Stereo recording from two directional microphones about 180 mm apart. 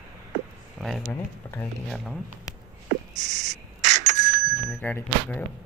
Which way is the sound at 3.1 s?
40° right (ahead or behind).